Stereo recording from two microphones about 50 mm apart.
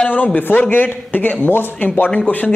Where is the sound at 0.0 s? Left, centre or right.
Left.